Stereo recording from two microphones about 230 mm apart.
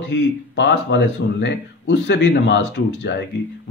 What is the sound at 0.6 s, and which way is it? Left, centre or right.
Speech, left.